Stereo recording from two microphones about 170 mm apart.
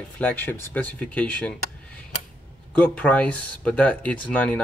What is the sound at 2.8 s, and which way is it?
Speech, 10° left (ahead or behind).